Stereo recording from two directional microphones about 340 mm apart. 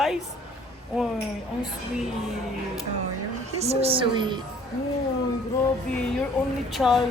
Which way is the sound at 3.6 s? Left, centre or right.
Centre.